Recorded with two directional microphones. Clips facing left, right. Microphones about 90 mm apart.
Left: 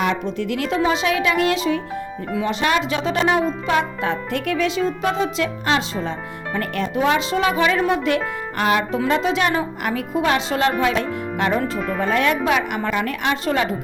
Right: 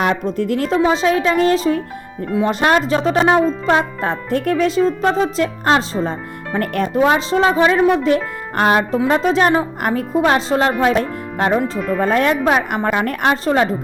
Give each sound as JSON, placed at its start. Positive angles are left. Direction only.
{"t": 0.0, "sound": "speech", "side_deg": -45}